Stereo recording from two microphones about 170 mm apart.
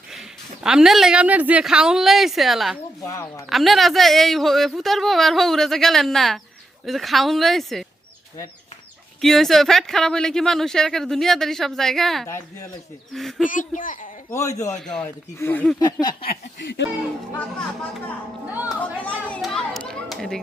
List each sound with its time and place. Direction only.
0.1 s a woman's voice: 5° right (ahead or behind)
3.1 s a sound: 20° left (ahead or behind)
3.5 s speech: centre (ahead or behind)
9.2 s speech: centre (ahead or behind)
13.5 s a child's voice: 50° left (ahead or behind)
14.3 s speech: 20° left (ahead or behind)
14.8 s speech: 5° left (ahead or behind)
15.0 s speech: 15° left (ahead or behind)
15.8 s a sound: 25° left (ahead or behind)
16.2 s speech: 75° left (ahead or behind)
19.0 s speech: 5° left (ahead or behind)